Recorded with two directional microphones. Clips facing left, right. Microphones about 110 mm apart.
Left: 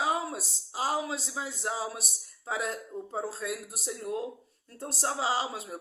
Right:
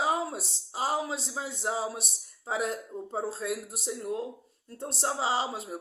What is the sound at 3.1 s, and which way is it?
Speech, 30° right (ahead or behind).